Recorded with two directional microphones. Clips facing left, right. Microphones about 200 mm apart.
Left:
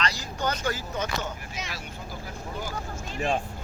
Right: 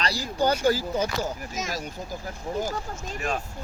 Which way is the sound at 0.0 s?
35° right (ahead or behind).